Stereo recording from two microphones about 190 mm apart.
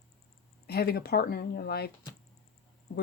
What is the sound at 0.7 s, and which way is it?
Speech, 55° left (ahead or behind).